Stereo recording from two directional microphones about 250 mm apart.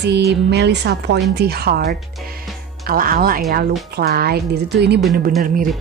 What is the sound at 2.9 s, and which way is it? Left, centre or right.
A woman's voice, right.